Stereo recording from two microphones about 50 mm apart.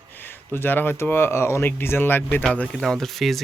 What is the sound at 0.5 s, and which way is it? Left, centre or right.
Speech, left.